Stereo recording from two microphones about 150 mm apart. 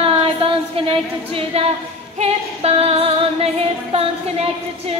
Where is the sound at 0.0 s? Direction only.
40° right (ahead or behind).